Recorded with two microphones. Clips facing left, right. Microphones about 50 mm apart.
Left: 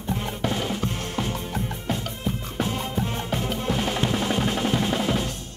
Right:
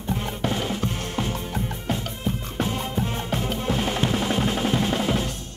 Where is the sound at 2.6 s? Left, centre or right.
Centre.